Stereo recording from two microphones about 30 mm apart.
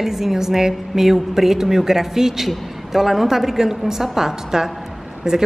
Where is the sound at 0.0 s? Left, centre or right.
Centre.